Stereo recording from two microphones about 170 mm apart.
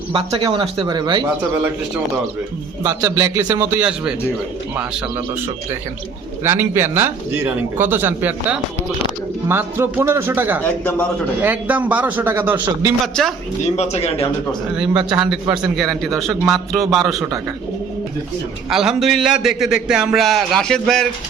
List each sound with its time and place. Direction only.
0.1 s speech: 30° right (ahead or behind)
2.8 s a man's voice: 15° right (ahead or behind)
6.4 s a man's voice: 15° right (ahead or behind)
13.2 s a man's voice: 5° left (ahead or behind)
13.7 s speech: 40° left (ahead or behind)
15.1 s a man's voice: 5° right (ahead or behind)
18.7 s a man's voice: 5° right (ahead or behind)